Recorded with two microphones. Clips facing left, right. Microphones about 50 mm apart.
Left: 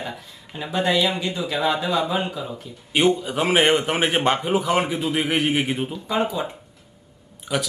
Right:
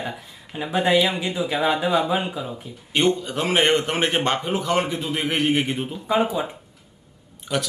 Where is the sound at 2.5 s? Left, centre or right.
Centre.